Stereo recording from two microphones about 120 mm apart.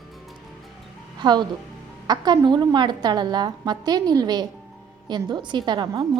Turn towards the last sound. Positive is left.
turn(degrees=-30)  # may be behind; listen again after turning